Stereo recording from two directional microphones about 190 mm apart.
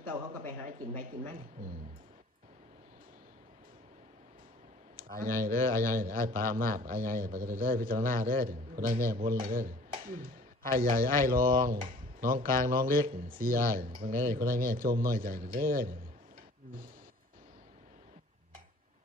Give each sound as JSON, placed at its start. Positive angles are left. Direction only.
{"t": 0.4, "sound": "a man's voice", "side_deg": -45}
{"t": 5.1, "sound": "a man's voice", "side_deg": -50}